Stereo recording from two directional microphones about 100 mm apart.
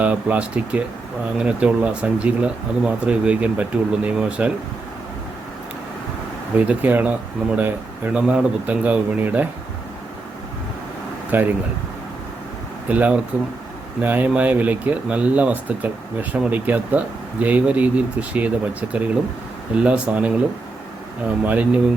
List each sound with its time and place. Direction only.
0.0 s speech: 15° right (ahead or behind)
6.6 s speech: 15° right (ahead or behind)
11.3 s speech: 15° right (ahead or behind)
12.9 s speech: 15° right (ahead or behind)
21.4 s speech: 15° right (ahead or behind)